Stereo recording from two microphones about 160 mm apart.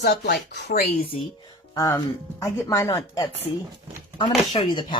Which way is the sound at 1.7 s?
20° left (ahead or behind).